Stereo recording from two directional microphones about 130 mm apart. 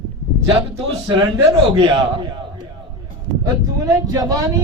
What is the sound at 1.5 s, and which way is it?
Speech, 40° right (ahead or behind).